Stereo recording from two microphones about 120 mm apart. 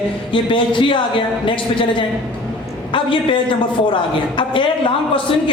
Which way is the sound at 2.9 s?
45° left (ahead or behind).